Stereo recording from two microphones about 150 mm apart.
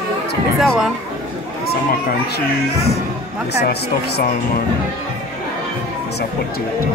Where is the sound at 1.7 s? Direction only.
90° left.